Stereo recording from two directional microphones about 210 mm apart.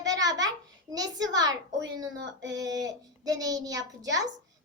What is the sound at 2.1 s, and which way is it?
Female singing, 60° right (ahead or behind).